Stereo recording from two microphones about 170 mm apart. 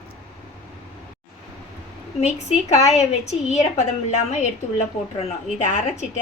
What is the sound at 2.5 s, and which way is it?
A woman's voice, 40° left (ahead or behind).